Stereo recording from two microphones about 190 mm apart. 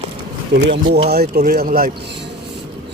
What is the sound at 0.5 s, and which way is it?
Speech, 70° right (ahead or behind).